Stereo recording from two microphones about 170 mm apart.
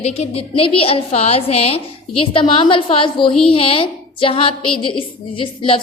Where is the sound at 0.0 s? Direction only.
35° left (ahead or behind).